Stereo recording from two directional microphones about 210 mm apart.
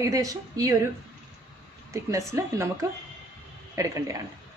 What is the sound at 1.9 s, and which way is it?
Speech, 15° right (ahead or behind).